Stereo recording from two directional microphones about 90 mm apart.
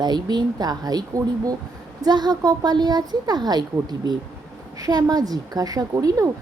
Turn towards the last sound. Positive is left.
turn(degrees=-40)  # may be behind; listen again after turning